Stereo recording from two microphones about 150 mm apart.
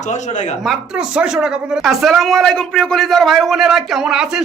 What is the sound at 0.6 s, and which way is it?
Speech, 5° right (ahead or behind).